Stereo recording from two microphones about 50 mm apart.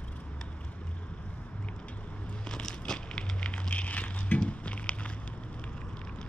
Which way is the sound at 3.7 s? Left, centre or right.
Left.